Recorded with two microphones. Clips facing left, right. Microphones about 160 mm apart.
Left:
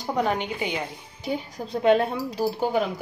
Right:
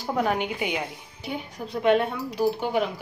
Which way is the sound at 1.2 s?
35° left (ahead or behind).